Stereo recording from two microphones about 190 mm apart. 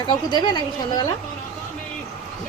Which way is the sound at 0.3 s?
20° left (ahead or behind).